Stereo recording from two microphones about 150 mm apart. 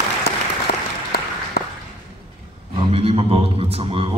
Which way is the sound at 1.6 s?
90° left.